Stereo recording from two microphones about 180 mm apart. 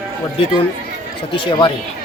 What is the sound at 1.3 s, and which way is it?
Speech, 30° left (ahead or behind).